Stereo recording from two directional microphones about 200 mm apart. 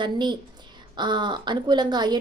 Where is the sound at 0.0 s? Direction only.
20° right (ahead or behind).